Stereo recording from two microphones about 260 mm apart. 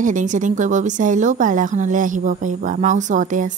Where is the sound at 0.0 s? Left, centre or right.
Right.